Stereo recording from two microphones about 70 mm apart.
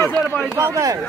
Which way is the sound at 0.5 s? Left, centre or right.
Right.